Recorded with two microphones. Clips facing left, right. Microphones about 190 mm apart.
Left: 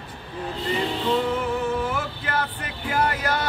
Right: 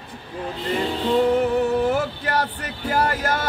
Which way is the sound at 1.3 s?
40° right (ahead or behind).